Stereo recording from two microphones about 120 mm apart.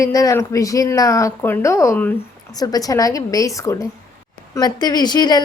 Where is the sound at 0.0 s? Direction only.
25° left (ahead or behind).